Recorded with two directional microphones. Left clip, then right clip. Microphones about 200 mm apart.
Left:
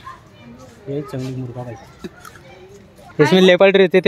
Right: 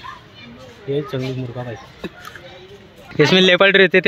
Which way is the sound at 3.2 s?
15° left (ahead or behind).